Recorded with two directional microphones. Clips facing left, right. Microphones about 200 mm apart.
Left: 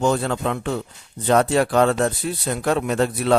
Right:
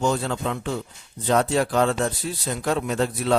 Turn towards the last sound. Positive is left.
turn(degrees=65)  # may be behind; listen again after turning